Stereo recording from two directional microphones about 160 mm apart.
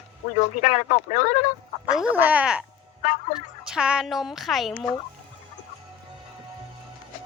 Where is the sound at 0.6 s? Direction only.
45° left (ahead or behind).